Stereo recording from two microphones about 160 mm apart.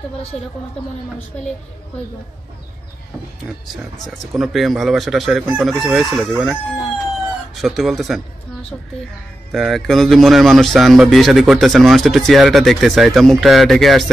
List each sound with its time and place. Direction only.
0.3 s speech: 45° left (ahead or behind)
4.3 s a man's voice: centre (ahead or behind)
9.5 s a man's voice: centre (ahead or behind)